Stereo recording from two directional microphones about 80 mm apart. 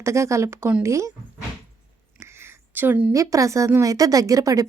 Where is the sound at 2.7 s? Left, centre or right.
Right.